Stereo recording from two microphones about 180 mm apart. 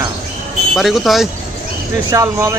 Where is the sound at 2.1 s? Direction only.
15° right (ahead or behind).